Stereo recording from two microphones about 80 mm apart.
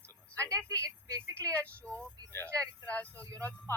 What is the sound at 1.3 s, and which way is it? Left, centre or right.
Speech, centre.